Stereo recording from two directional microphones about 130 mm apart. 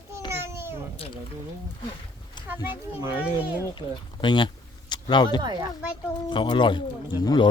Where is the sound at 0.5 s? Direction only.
20° right (ahead or behind).